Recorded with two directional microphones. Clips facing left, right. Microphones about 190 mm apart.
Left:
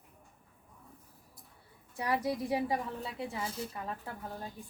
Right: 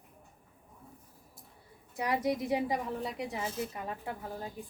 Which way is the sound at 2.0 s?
20° right (ahead or behind).